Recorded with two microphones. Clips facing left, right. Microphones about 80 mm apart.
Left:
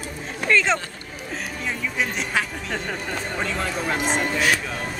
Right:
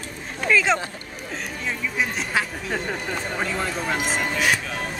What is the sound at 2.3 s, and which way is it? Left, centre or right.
Speech, centre.